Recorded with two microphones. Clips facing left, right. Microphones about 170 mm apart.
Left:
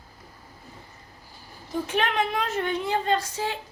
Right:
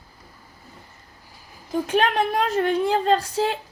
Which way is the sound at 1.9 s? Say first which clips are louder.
Right 5 dB; 50° right (ahead or behind).